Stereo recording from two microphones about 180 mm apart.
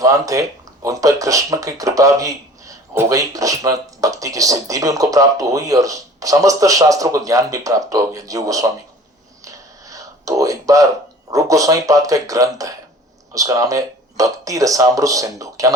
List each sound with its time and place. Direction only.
0.0 s speech: 20° right (ahead or behind)
9.4 s a sound: 20° right (ahead or behind)
11.3 s speech: 20° right (ahead or behind)